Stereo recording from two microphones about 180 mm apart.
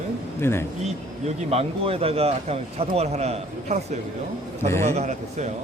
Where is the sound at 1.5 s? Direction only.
35° right (ahead or behind).